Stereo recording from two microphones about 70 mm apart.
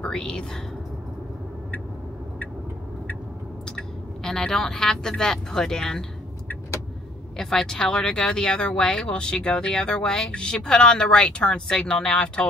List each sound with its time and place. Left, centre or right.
0.0 s speech: centre
3.6 s speech: centre
7.3 s speech: centre